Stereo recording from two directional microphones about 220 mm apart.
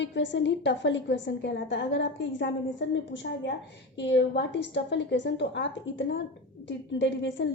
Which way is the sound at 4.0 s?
50° left (ahead or behind).